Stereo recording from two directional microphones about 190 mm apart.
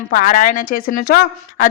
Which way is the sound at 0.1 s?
45° left (ahead or behind).